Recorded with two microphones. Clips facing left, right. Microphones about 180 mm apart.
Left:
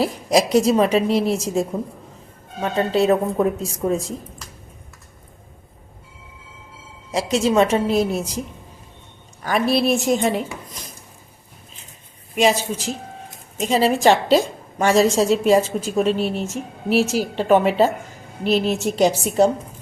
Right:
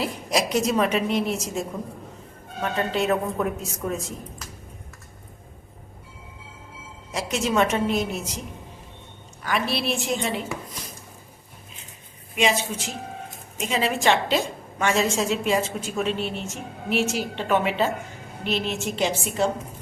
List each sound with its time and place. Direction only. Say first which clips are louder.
0.0 s a woman's voice: left 7 dB; 35° left (ahead or behind)
7.1 s a woman's voice: left 6 dB; 35° left (ahead or behind)
9.4 s a woman's voice: left 7 dB; 40° left (ahead or behind)
12.4 s a woman's voice: left 5 dB; 40° left (ahead or behind)